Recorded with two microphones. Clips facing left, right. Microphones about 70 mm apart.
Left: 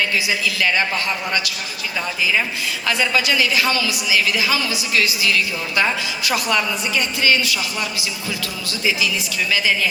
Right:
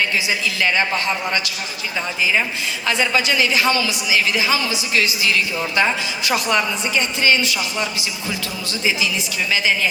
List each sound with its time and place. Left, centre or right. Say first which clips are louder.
0.3 s a woman's voice: even; right
2.8 s a woman's voice: even; right